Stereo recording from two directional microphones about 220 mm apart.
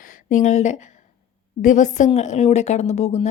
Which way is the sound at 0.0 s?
35° left (ahead or behind).